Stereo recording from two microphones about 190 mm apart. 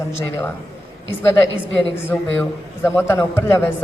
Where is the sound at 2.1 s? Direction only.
10° left (ahead or behind).